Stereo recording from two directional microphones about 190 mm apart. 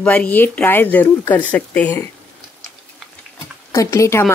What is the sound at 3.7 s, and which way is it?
Speech, 15° left (ahead or behind).